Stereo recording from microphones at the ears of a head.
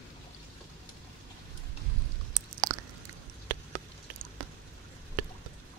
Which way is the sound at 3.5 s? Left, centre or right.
Right.